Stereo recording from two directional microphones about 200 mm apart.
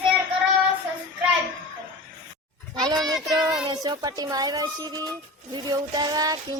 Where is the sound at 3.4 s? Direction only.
20° right (ahead or behind).